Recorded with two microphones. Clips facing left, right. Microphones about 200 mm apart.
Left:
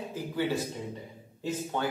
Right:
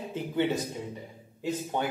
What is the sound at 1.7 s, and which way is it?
Speech, 15° right (ahead or behind).